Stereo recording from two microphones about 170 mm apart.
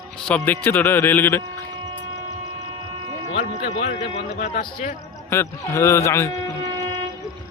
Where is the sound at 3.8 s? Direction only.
45° left (ahead or behind).